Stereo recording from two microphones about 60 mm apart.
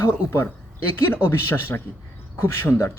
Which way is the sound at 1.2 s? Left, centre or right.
Left.